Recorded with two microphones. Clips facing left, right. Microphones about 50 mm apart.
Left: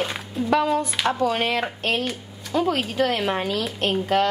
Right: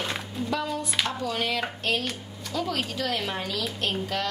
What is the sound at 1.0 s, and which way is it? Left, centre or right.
Speech, left.